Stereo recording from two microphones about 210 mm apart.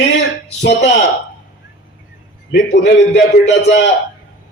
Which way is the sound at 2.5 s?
55° left (ahead or behind).